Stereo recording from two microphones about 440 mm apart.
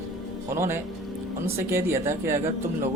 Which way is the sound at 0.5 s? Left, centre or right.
Centre.